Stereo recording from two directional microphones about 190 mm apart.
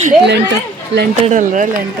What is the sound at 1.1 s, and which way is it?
Speech, 40° right (ahead or behind).